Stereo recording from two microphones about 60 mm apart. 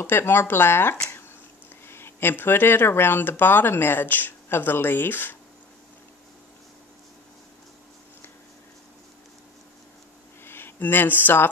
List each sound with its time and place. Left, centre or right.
0.0 s speech: left
10.4 s speech: left